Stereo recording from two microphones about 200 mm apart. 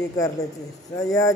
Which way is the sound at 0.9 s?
15° left (ahead or behind).